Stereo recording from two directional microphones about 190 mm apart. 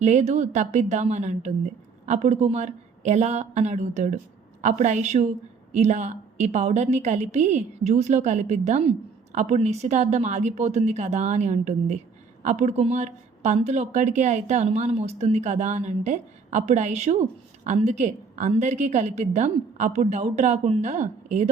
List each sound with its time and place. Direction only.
0.0 s speech: 35° right (ahead or behind)